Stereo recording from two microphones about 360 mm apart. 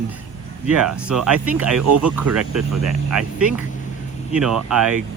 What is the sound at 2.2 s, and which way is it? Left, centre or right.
Speech, right.